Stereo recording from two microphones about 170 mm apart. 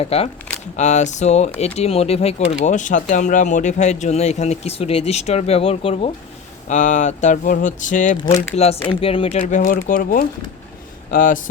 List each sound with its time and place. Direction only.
0.0 s speech: 35° left (ahead or behind)
6.7 s speech: 45° left (ahead or behind)
8.4 s speech: 40° left (ahead or behind)
9.5 s speech: 50° left (ahead or behind)